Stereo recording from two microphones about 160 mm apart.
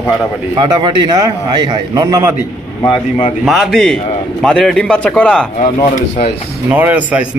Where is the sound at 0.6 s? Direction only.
30° right (ahead or behind).